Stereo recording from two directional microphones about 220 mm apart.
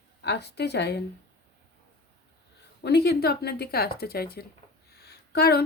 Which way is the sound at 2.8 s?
50° left (ahead or behind).